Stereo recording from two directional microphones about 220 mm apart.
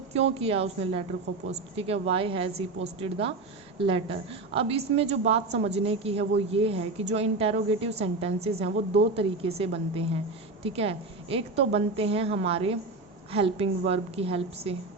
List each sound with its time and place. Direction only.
0.1 s a woman's voice: 25° right (ahead or behind)